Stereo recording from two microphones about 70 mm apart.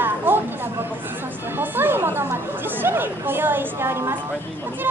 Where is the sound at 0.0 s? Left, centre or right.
Right.